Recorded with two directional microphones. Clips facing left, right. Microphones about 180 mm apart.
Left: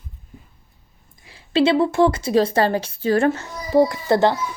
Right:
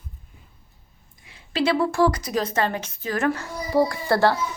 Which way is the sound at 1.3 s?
25° left (ahead or behind).